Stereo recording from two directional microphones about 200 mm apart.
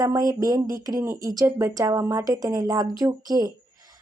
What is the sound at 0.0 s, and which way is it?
Speech, 15° right (ahead or behind).